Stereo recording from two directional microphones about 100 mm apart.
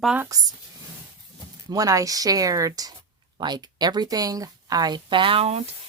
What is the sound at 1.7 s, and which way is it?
Speech, 35° right (ahead or behind).